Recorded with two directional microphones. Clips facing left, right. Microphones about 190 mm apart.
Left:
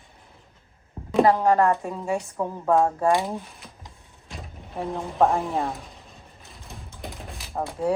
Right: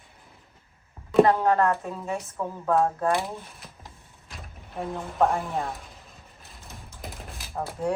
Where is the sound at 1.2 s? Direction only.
15° left (ahead or behind).